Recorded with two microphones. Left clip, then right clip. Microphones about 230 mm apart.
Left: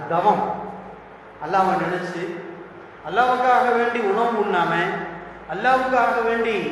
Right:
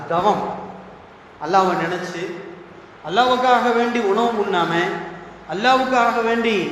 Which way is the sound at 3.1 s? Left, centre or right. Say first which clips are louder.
Right 2 dB; right.